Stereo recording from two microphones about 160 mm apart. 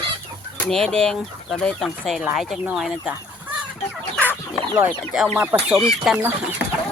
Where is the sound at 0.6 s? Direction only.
5° left (ahead or behind).